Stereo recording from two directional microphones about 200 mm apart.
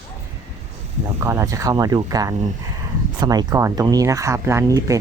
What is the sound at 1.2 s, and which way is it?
Speech, 15° right (ahead or behind).